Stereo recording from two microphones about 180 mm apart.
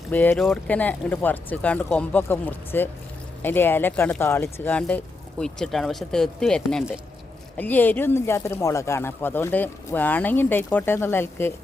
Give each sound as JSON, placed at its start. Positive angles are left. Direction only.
{"t": 0.1, "sound": "speech", "side_deg": 10}